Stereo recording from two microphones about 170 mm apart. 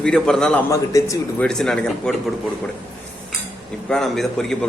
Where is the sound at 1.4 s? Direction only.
5° left (ahead or behind).